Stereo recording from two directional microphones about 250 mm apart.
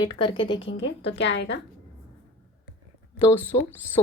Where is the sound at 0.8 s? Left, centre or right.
Left.